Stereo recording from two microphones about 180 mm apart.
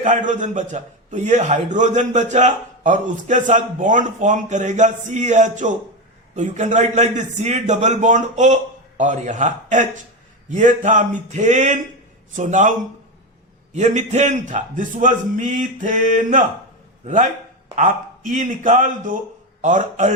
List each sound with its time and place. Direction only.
0.0 s a man's voice: 45° right (ahead or behind)
13.7 s a man's voice: 40° right (ahead or behind)
17.7 s a man's voice: 45° right (ahead or behind)